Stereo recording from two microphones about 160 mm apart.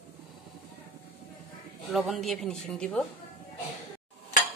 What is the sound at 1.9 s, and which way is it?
Speech, centre (ahead or behind).